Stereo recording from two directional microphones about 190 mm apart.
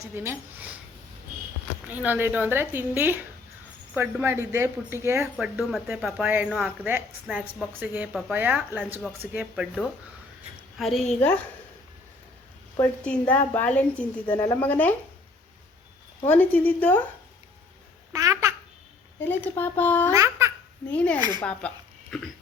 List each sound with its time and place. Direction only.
0.0 s speech: 15° right (ahead or behind)
1.9 s a woman's voice: 10° right (ahead or behind); by 11.3 s 5° left (ahead or behind)
13.1 s a woman's voice: 10° left (ahead or behind)
16.2 s a woman's voice: 10° left (ahead or behind)
18.1 s a child's voice: 15° right (ahead or behind)
19.2 s a woman's voice: 10° left (ahead or behind)
20.1 s babbling: 15° right (ahead or behind)
20.9 s a woman's voice: 5° left (ahead or behind)
21.2 s speech: 20° right (ahead or behind)
21.6 s speech: 5° left (ahead or behind)